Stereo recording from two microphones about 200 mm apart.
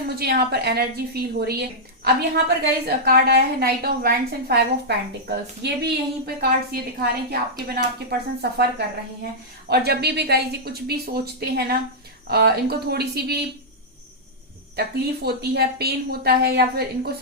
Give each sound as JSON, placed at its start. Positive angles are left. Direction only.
{"t": 0.2, "sound": "a woman's voice", "side_deg": -50}
{"t": 9.6, "sound": "a woman's voice", "side_deg": -55}
{"t": 14.8, "sound": "a woman's voice", "side_deg": -50}